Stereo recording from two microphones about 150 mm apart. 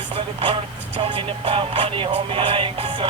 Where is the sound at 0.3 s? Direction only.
35° right (ahead or behind).